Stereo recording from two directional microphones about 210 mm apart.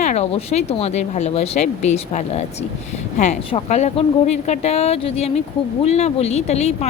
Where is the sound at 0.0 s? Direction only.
30° left (ahead or behind).